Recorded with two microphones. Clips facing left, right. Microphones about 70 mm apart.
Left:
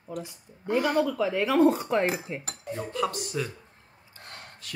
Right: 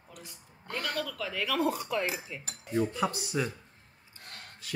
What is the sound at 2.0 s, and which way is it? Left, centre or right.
Cutlery, left.